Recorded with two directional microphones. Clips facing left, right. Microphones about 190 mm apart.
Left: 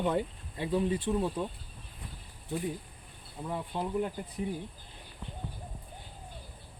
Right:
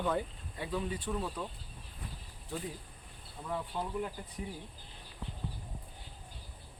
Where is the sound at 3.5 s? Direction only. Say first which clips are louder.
Left 3 dB; 20° left (ahead or behind).